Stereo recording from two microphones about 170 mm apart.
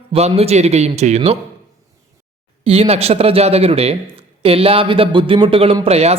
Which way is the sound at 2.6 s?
35° right (ahead or behind).